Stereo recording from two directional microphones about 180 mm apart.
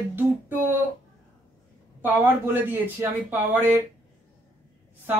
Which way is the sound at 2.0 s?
10° right (ahead or behind).